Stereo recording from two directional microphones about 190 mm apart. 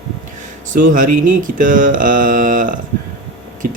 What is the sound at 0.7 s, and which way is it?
A man's voice, 45° right (ahead or behind).